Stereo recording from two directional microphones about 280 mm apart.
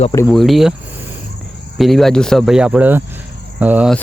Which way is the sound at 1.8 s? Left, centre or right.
Centre.